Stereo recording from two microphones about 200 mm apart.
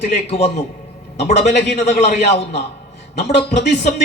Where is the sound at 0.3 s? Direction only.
30° left (ahead or behind).